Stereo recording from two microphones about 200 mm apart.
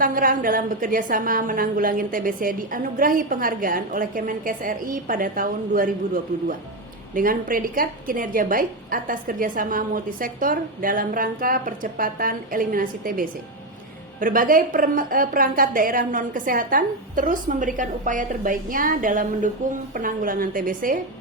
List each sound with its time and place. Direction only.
0.0 s a woman's voice: 45° right (ahead or behind)
7.1 s a woman's voice: 45° right (ahead or behind)